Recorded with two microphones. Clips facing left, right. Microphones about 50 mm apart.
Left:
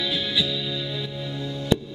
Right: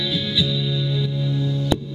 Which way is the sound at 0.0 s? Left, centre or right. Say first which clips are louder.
Right 2 dB; centre.